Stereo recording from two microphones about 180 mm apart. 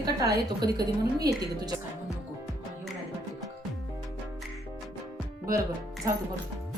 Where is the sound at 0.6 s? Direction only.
20° right (ahead or behind).